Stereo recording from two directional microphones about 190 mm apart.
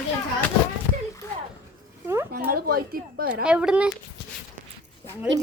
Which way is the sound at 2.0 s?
15° right (ahead or behind).